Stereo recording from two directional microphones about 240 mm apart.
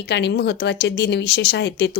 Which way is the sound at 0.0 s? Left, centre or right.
Left.